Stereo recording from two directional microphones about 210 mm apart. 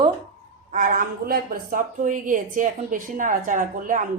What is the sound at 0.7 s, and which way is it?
A woman's voice, 35° right (ahead or behind).